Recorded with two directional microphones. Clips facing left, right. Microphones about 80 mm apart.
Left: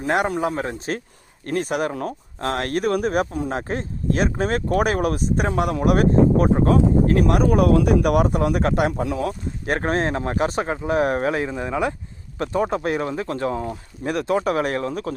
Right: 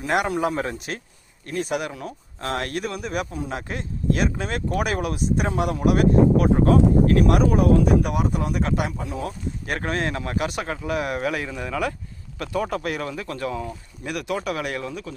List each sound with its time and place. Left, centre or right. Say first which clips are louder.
0.0 s speech: left 1 dB; left
1.5 s speech: left 4 dB; left
7.5 s speech: left 1 dB; left
9.6 s speech: left 5 dB; left